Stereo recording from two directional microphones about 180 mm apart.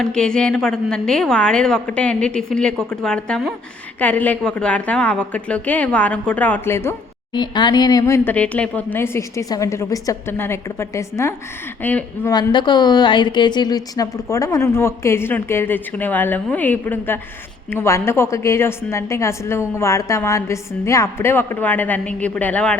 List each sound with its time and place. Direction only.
0.0 s a woman's voice: 5° left (ahead or behind)
7.3 s a woman's voice: 25° left (ahead or behind)
12.3 s a woman's voice: 25° left (ahead or behind); by 22.8 s 5° left (ahead or behind)